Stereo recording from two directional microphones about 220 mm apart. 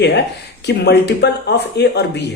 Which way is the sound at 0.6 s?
50° left (ahead or behind).